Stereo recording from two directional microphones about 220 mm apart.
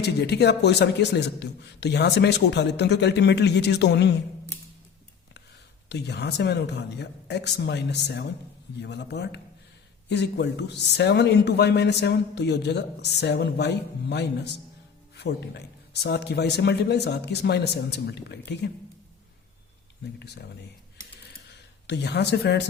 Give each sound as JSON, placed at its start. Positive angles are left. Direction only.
{"t": 0.0, "sound": "a man's voice", "side_deg": 50}
{"t": 5.9, "sound": "a man's voice", "side_deg": 50}
{"t": 20.1, "sound": "a man's voice", "side_deg": 50}
{"t": 21.8, "sound": "a man's voice", "side_deg": 50}